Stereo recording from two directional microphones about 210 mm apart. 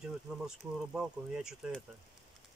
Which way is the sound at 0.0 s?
5° right (ahead or behind).